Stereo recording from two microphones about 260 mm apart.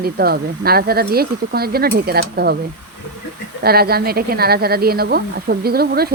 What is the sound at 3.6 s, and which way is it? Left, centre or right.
Speech, right.